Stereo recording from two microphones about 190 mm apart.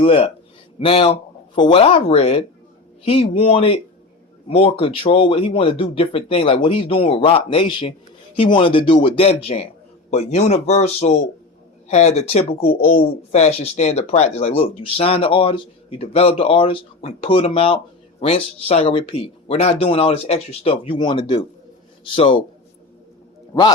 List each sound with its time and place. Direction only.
0.0 s speech: 30° left (ahead or behind)